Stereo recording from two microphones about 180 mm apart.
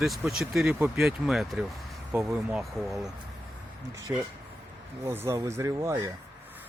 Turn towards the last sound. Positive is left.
turn(degrees=-15)  # may be behind; listen again after turning